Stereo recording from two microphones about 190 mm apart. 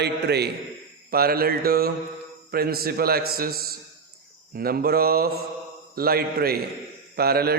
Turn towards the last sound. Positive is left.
turn(degrees=-55)  # may be behind; listen again after turning